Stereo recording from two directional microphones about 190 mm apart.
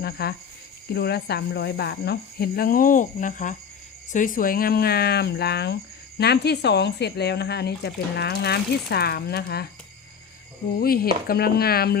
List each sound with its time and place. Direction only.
0.0 s speech: 55° left (ahead or behind)
10.8 s chopping: 50° left (ahead or behind)